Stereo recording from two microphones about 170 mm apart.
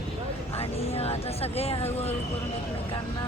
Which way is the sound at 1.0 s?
35° left (ahead or behind).